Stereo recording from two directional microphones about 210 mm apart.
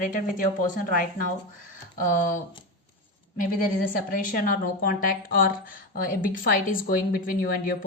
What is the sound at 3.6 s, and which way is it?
A woman's voice, 40° left (ahead or behind).